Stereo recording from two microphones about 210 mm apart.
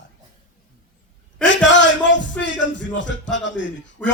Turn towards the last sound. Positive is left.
turn(degrees=10)  # may be behind; listen again after turning